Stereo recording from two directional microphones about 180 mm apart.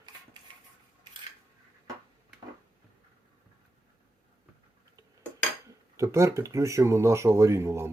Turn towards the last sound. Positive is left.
turn(degrees=-15)  # may be behind; listen again after turning